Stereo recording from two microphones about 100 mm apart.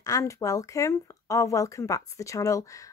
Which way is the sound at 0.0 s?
35° left (ahead or behind).